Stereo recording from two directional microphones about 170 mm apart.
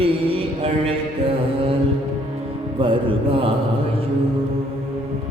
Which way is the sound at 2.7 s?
30° right (ahead or behind).